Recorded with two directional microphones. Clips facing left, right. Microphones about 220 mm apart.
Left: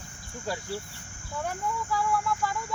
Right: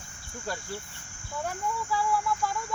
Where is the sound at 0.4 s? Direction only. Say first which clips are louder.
Left 3 dB; 10° left (ahead or behind).